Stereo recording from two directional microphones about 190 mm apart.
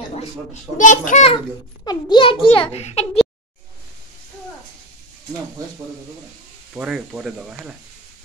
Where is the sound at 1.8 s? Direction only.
25° left (ahead or behind).